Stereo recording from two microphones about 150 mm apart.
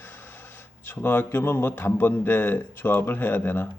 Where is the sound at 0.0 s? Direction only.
15° left (ahead or behind).